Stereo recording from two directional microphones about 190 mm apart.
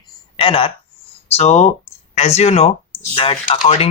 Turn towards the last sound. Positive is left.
turn(degrees=30)  # may be behind; listen again after turning